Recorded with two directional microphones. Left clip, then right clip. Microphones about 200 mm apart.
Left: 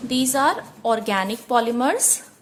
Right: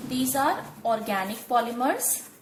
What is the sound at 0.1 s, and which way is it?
A woman's voice, 45° left (ahead or behind).